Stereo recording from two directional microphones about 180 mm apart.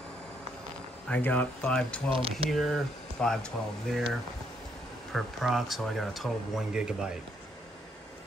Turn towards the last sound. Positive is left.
turn(degrees=-5)  # may be behind; listen again after turning